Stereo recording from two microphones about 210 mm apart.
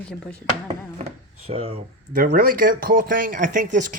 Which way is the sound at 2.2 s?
40° right (ahead or behind).